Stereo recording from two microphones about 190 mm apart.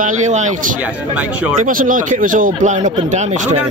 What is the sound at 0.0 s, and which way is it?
Speech, 40° right (ahead or behind).